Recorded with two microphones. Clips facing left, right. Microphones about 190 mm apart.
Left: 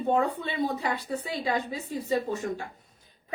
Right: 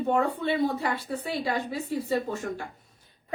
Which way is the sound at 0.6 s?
15° left (ahead or behind).